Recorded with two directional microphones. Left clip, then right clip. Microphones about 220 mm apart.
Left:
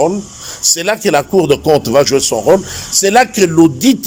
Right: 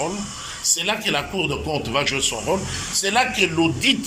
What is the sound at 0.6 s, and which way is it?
A man's voice, 45° left (ahead or behind).